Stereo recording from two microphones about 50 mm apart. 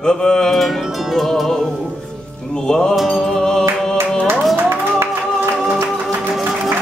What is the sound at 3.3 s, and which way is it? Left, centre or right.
Music, centre.